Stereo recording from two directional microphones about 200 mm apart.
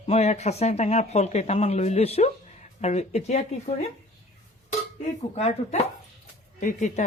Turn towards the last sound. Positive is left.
turn(degrees=35)  # may be behind; listen again after turning